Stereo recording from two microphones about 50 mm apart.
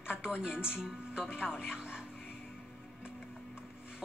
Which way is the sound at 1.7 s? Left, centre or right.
Centre.